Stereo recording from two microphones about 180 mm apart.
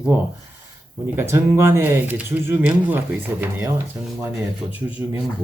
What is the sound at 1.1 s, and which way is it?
Speech, 15° right (ahead or behind).